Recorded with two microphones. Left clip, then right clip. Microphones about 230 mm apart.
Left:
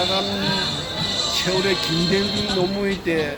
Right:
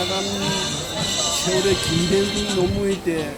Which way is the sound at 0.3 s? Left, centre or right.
Right.